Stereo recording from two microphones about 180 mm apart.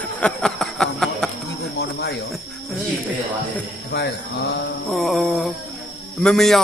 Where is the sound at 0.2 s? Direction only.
5° left (ahead or behind).